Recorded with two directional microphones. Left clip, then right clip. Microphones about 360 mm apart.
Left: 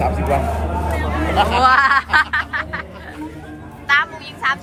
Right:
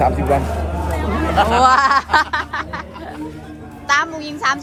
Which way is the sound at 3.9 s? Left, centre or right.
Centre.